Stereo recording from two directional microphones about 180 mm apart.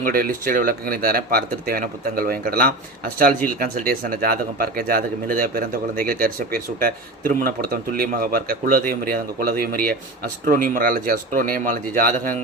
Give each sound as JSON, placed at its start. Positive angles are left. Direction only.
{"t": 0.0, "sound": "speech", "side_deg": -50}